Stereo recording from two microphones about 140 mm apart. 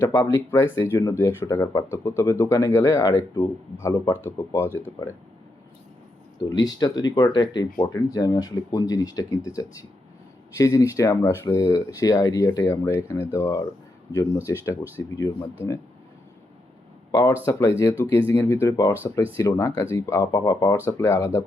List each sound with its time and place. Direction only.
0.1 s speech: 25° left (ahead or behind)
6.5 s speech: 30° left (ahead or behind)
17.1 s speech: 25° left (ahead or behind)